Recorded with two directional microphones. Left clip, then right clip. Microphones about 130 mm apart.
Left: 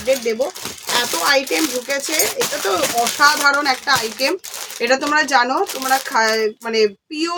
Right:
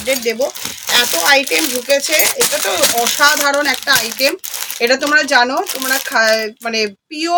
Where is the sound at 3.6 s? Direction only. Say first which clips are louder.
Right 3 dB; 45° left (ahead or behind).